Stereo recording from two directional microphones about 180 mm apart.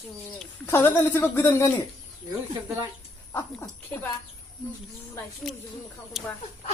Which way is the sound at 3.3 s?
15° left (ahead or behind).